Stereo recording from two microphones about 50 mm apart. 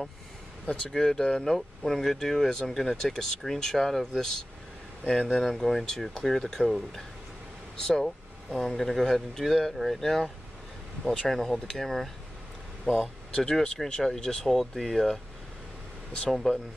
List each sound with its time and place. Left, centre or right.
0.7 s speech: centre
5.3 s speech: centre
7.8 s speech: centre
12.9 s speech: left
13.4 s speech: centre
16.3 s speech: centre